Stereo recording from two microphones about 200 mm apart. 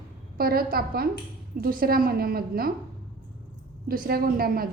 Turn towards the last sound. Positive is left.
turn(degrees=-45)  # may be behind; listen again after turning